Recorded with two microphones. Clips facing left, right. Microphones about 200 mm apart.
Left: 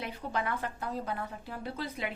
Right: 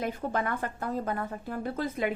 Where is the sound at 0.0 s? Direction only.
50° right (ahead or behind).